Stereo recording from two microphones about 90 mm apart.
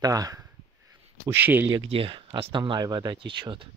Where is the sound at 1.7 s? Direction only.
80° right.